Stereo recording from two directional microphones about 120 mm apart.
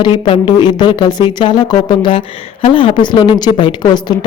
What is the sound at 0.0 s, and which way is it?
Speech, 40° left (ahead or behind).